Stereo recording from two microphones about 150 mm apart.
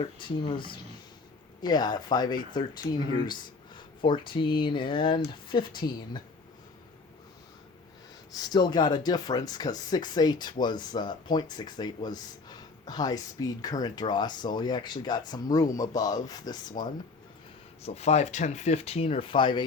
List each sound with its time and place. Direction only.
0.0 s speech: 35° left (ahead or behind)
8.3 s speech: 25° left (ahead or behind)
17.8 s speech: 45° left (ahead or behind)